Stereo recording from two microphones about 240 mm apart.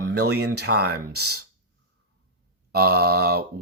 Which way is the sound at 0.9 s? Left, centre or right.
Right.